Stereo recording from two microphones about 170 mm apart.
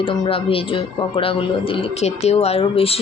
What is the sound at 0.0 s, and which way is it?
A man's voice, 30° left (ahead or behind).